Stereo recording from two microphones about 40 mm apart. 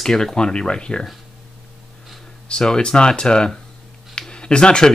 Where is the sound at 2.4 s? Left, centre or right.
Left.